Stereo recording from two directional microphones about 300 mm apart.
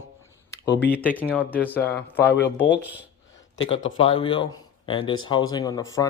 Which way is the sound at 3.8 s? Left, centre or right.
Centre.